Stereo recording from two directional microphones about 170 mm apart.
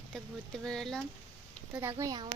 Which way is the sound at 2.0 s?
20° right (ahead or behind).